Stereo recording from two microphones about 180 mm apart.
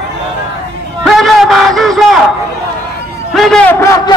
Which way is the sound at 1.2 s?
Centre (ahead or behind).